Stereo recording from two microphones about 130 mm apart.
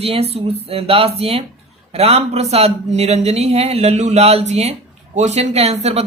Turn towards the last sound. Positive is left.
turn(degrees=-55)  # may be behind; listen again after turning